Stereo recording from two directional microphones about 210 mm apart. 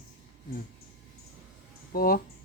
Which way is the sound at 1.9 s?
45° left (ahead or behind).